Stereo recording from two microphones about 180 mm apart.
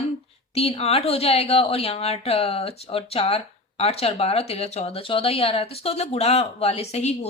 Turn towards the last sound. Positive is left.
turn(degrees=35)  # may be behind; listen again after turning